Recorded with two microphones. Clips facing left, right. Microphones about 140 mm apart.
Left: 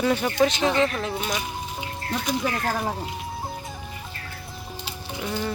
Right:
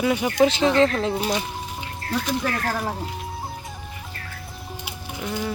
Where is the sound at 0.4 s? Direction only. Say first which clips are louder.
Right 4 dB; 25° right (ahead or behind).